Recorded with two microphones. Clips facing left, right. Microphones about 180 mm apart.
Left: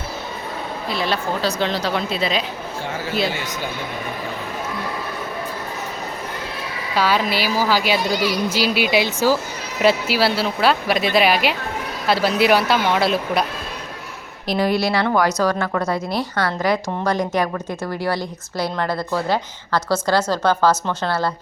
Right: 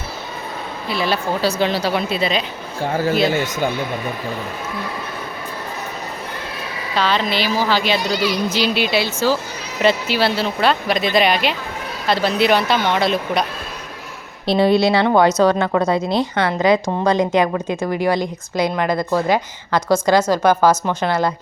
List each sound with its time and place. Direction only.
0.9 s speech: 5° right (ahead or behind)
2.8 s speech: 45° right (ahead or behind)
6.9 s a woman's voice: 10° left (ahead or behind)
14.4 s a woman's voice: 25° right (ahead or behind)